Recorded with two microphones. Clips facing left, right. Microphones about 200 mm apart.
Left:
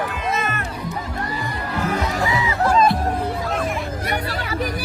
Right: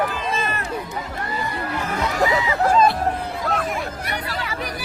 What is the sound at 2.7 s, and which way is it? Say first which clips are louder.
Music: even; centre (ahead or behind).